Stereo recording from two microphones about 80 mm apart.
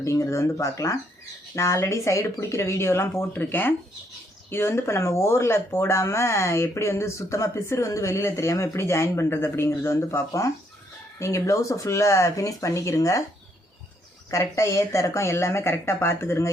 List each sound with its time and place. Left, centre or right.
0.0 s speech: left
14.3 s speech: left